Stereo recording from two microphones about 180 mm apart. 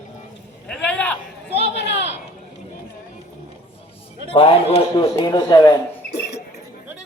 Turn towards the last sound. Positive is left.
turn(degrees=65)  # may be behind; listen again after turning